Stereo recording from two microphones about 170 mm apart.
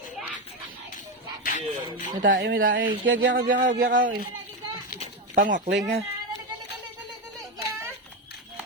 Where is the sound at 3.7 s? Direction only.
60° right (ahead or behind).